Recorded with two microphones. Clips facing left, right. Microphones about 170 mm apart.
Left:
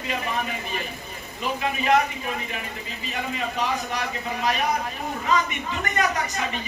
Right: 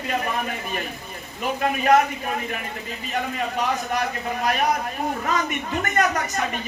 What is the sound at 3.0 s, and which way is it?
Speech, 50° right (ahead or behind).